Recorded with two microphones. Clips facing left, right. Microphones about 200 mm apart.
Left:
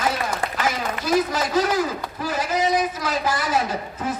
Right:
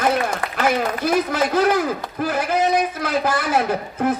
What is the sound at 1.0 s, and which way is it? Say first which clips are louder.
Speech: even; 60° right (ahead or behind).